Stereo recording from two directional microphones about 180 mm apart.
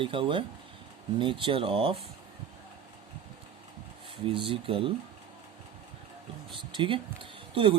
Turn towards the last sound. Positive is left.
turn(degrees=-30)  # may be behind; listen again after turning